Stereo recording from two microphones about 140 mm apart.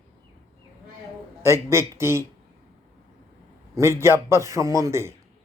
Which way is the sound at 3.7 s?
20° right (ahead or behind).